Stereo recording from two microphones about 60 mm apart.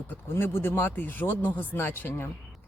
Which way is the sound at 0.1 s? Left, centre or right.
Left.